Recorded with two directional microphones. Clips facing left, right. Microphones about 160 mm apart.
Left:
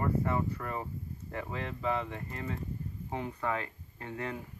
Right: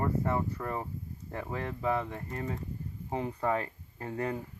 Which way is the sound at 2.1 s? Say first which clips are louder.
Right 2 dB; 40° right (ahead or behind).